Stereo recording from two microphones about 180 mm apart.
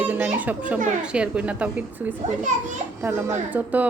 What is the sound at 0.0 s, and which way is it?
Children playing, 10° right (ahead or behind).